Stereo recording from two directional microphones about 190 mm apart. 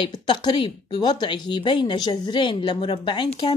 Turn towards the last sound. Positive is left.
turn(degrees=25)  # may be behind; listen again after turning